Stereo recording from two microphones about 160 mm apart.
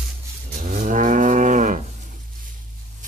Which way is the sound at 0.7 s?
55° right (ahead or behind).